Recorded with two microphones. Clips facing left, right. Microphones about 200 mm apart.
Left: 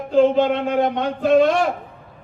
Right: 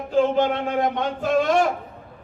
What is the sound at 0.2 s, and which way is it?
A man's voice, 60° left (ahead or behind).